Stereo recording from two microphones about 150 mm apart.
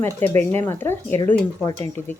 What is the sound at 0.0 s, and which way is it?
Speech, 15° left (ahead or behind).